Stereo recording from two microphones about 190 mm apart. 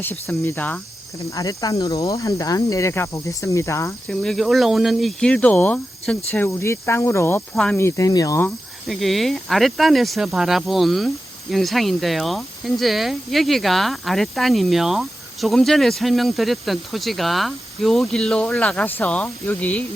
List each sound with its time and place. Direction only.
0.0 s speech: 10° left (ahead or behind)
4.1 s speech: 5° left (ahead or behind)
8.9 s speech: centre (ahead or behind)